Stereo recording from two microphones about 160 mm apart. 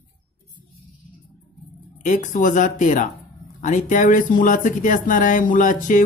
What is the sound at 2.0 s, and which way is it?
Speech, 50° left (ahead or behind).